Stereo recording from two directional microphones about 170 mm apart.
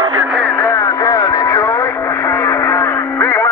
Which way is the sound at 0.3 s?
5° left (ahead or behind).